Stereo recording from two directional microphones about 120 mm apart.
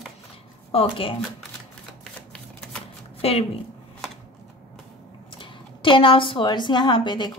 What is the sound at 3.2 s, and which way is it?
Speech, 60° left (ahead or behind).